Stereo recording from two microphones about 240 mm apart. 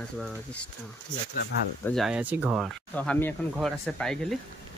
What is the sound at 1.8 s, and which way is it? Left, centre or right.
Speech, centre.